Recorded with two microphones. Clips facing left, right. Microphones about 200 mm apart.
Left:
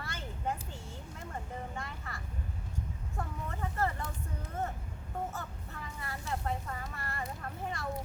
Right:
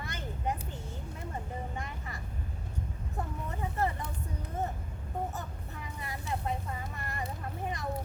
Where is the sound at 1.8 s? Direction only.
15° right (ahead or behind).